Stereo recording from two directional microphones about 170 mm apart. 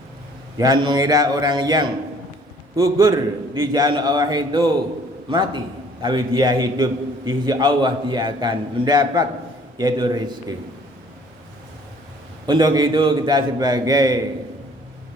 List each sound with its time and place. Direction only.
0.5 s a man's voice: 25° right (ahead or behind)
12.5 s a man's voice: 25° right (ahead or behind)